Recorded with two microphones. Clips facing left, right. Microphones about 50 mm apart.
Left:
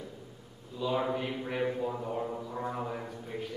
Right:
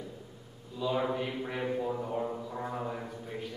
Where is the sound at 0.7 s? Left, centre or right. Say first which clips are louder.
Even; centre.